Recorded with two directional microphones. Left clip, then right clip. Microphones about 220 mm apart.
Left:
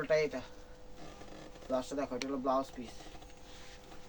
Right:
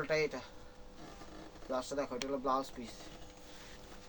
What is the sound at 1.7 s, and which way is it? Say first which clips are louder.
Speech: left 1 dB; 25° right (ahead or behind).